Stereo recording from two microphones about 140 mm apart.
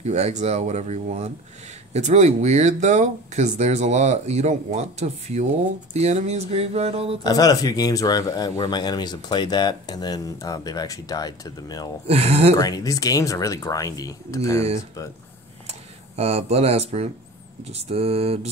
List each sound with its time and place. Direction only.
0.0 s speech: 50° right (ahead or behind)
7.2 s speech: 25° left (ahead or behind)
12.1 s speech: 50° right (ahead or behind)
12.5 s speech: 25° left (ahead or behind)
16.2 s speech: 45° right (ahead or behind)